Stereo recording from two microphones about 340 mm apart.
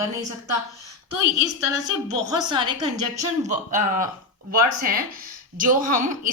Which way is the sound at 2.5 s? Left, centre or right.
Centre.